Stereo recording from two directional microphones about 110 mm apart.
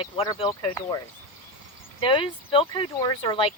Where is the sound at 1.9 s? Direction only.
55° left (ahead or behind).